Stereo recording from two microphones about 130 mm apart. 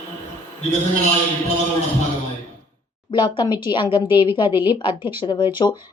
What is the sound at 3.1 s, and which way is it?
Speech, 35° left (ahead or behind).